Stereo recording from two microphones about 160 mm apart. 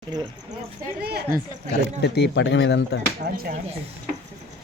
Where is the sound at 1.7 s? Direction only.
90° left.